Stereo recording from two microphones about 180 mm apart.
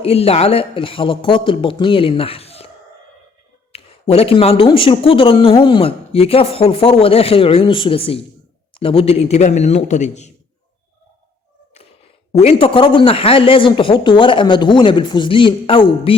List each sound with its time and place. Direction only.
0.0 s speech: 35° left (ahead or behind)
3.7 s speech: 35° left (ahead or behind)
12.3 s speech: 35° left (ahead or behind)